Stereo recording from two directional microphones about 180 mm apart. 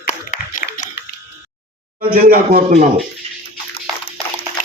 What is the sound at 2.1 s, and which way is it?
Speech, 55° right (ahead or behind).